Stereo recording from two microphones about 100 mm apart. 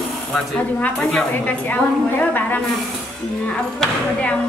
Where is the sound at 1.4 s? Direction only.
15° left (ahead or behind).